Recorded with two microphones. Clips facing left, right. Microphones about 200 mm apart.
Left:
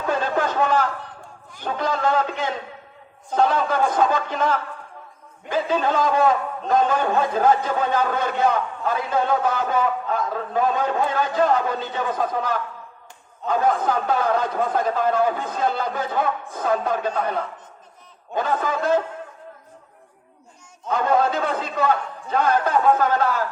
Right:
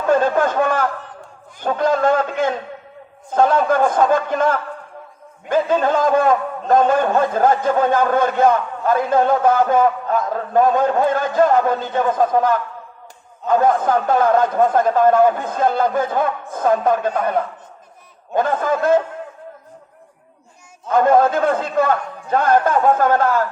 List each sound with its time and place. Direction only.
0.1 s a sound: 50° right (ahead or behind)
1.6 s a man's voice: 50° right (ahead or behind)
18.3 s a man's voice: 50° right (ahead or behind)
20.9 s a man's voice: 50° right (ahead or behind)